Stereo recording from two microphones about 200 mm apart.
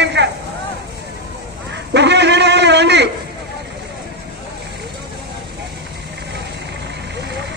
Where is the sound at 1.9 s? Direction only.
60° right (ahead or behind).